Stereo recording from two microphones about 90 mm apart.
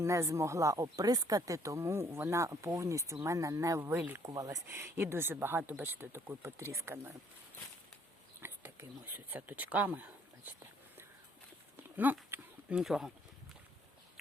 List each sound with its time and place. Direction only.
0.0 s speech: 35° right (ahead or behind)
8.4 s speech: 25° right (ahead or behind)
11.9 s a sound: 20° right (ahead or behind)
12.8 s speech: 5° right (ahead or behind)